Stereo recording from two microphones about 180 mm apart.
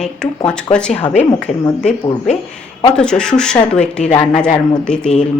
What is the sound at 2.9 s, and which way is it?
Speech, 5° left (ahead or behind).